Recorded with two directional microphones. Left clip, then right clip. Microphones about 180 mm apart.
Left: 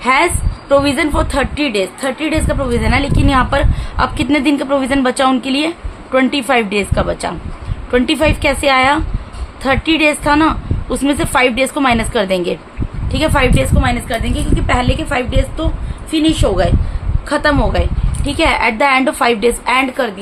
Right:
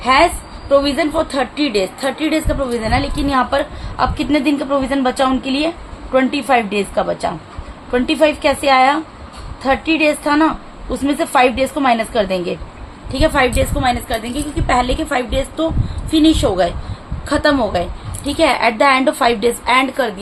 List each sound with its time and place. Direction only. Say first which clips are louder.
0.0 s a woman's voice: even; 25° left (ahead or behind)